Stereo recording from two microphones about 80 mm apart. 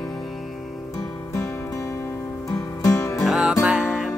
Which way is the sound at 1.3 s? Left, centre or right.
Left.